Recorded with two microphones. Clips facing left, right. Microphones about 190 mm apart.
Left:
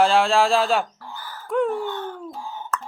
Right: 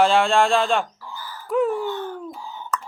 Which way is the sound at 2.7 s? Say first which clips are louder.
Right 1 dB; centre (ahead or behind).